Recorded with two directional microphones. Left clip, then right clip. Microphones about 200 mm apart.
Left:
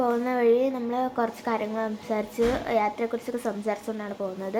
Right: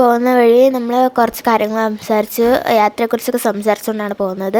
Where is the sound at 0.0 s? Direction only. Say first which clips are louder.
Right 13 dB; 50° right (ahead or behind).